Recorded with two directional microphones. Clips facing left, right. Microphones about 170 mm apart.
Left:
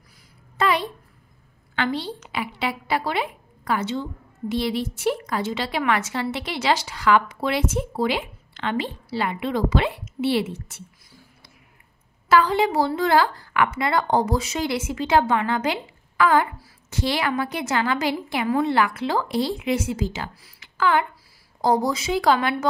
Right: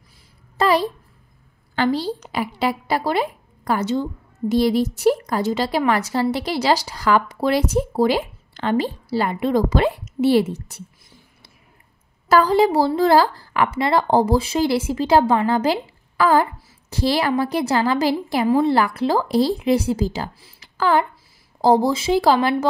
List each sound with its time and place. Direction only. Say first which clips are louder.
0.6 s a sound: right 5 dB; 35° right (ahead or behind)
1.8 s a woman's voice: right 5 dB; 35° right (ahead or behind)
12.3 s a woman's voice: right 4 dB; 40° right (ahead or behind)